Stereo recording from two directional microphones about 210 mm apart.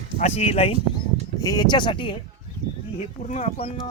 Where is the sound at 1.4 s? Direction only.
20° left (ahead or behind).